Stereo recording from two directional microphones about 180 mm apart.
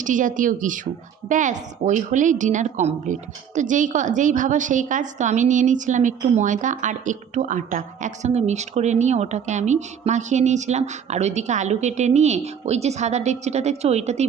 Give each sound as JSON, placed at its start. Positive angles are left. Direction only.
{"t": 0.0, "sound": "a woman's voice", "side_deg": -45}